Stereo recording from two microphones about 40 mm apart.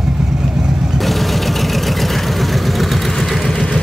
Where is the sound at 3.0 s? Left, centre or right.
Centre.